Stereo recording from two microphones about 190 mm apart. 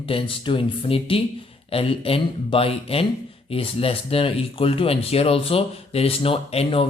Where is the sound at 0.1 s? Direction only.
30° left (ahead or behind).